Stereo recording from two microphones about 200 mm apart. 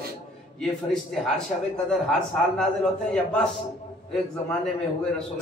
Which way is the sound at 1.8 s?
5° left (ahead or behind).